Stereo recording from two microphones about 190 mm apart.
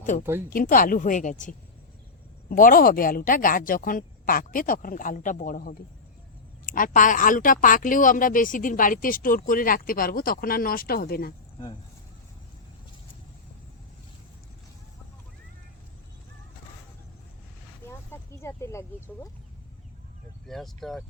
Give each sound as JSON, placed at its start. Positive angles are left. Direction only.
{"t": 0.0, "sound": "speech", "side_deg": 40}
{"t": 17.8, "sound": "a sound", "side_deg": 15}
{"t": 20.5, "sound": "speech", "side_deg": 0}